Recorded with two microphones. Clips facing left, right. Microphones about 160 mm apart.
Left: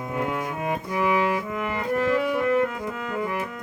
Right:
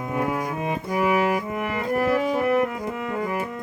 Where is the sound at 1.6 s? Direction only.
20° right (ahead or behind).